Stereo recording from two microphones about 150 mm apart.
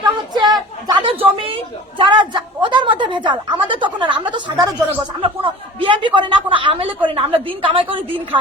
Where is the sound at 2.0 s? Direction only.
30° right (ahead or behind).